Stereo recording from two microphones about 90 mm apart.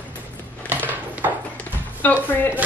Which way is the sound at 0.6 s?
20° right (ahead or behind).